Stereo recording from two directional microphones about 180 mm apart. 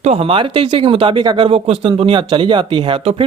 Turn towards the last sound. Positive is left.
turn(degrees=-30)  # may be behind; listen again after turning